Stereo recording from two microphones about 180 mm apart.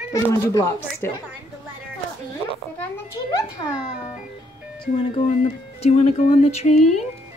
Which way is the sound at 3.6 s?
25° left (ahead or behind).